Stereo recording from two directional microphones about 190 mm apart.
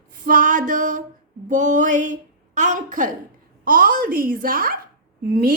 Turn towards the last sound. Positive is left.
turn(degrees=-50)  # may be behind; listen again after turning